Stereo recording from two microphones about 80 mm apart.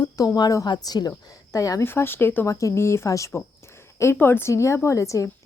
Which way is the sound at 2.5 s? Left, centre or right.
Left.